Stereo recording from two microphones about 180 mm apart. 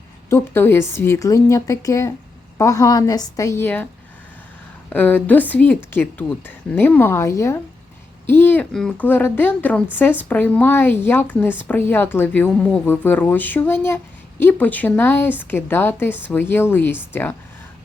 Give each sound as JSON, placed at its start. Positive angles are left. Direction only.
{"t": 0.3, "sound": "a woman's voice", "side_deg": 15}
{"t": 4.9, "sound": "a woman's voice", "side_deg": 10}